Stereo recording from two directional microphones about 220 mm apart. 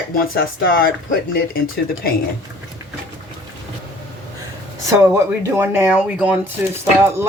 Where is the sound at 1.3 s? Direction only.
40° left (ahead or behind).